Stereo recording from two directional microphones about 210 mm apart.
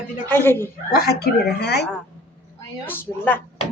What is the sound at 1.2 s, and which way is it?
Speech, 50° left (ahead or behind).